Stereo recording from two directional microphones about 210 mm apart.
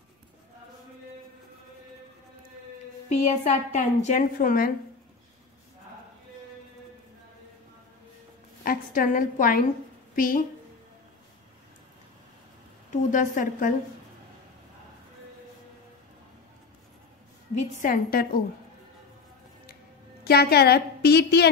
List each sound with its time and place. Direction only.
3.1 s a woman's voice: 30° left (ahead or behind)
8.6 s a woman's voice: 40° left (ahead or behind)
12.9 s a woman's voice: 40° left (ahead or behind)
17.6 s a woman's voice: 40° left (ahead or behind)
20.2 s a woman's voice: 50° left (ahead or behind)